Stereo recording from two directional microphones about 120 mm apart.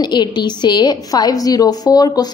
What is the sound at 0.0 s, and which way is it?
A woman's voice, 40° left (ahead or behind).